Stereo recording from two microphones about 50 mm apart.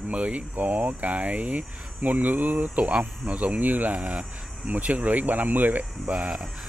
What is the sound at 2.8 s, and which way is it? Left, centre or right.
Speech, right.